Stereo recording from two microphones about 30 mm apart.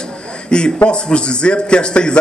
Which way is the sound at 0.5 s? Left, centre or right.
Left.